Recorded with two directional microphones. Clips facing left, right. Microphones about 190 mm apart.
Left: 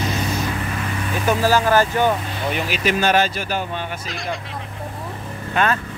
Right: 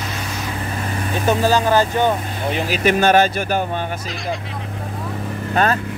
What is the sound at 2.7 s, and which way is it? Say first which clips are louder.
Speech: right 5 dB; 55° right (ahead or behind).